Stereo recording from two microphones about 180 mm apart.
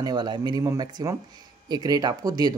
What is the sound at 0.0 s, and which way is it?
A woman's voice, 25° right (ahead or behind).